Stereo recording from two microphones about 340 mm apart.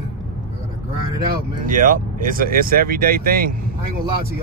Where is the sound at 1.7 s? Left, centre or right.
Right.